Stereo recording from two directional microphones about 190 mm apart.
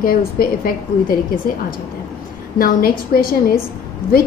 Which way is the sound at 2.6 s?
50° left (ahead or behind).